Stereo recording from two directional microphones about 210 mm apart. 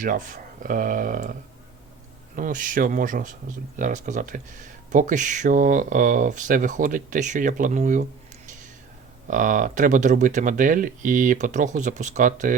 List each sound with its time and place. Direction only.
0.0 s speech: 40° right (ahead or behind)
9.2 s speech: 40° right (ahead or behind)